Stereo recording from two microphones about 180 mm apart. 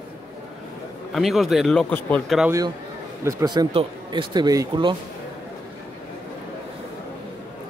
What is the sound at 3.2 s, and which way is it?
Speech, 20° right (ahead or behind).